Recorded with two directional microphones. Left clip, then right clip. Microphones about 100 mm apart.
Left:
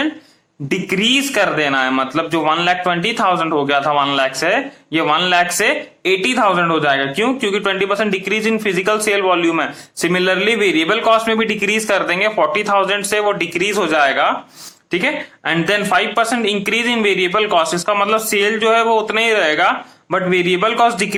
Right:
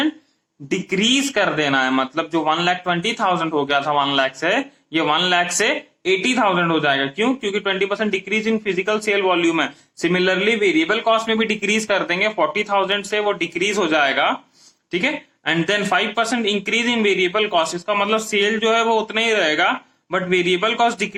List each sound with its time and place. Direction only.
0.7 s speech: 25° left (ahead or behind)